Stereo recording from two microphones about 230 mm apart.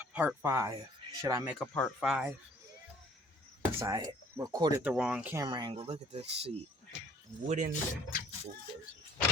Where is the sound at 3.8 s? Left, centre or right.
Centre.